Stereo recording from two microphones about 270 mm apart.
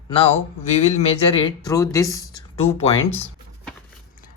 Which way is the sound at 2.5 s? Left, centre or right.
Left.